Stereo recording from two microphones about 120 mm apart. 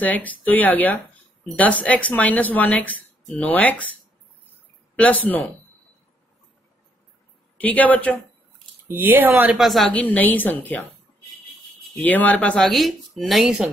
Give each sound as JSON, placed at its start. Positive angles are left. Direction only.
{"t": 0.0, "sound": "speech", "side_deg": 15}
{"t": 4.9, "sound": "speech", "side_deg": 10}
{"t": 7.5, "sound": "speech", "side_deg": 15}
{"t": 8.8, "sound": "speech", "side_deg": -20}
{"t": 9.6, "sound": "speech", "side_deg": 0}
{"t": 9.9, "sound": "speech", "side_deg": 15}
{"t": 12.0, "sound": "speech", "side_deg": 15}